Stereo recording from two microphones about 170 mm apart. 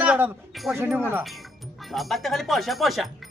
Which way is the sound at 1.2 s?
Centre (ahead or behind).